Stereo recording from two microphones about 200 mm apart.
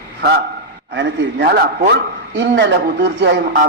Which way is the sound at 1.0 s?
60° right (ahead or behind).